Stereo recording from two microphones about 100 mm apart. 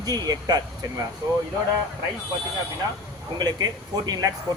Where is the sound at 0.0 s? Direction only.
40° right (ahead or behind).